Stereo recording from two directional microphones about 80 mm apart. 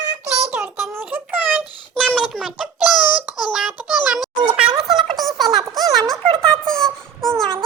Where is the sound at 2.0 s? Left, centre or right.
Centre.